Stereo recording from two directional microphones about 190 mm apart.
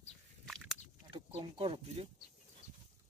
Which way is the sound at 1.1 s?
30° right (ahead or behind).